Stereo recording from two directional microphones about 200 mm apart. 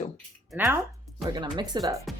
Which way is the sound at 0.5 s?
15° right (ahead or behind).